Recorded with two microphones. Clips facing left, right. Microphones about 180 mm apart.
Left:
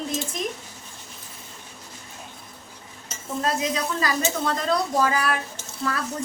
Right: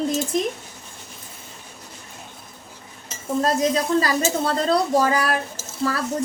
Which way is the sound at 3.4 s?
35° right (ahead or behind).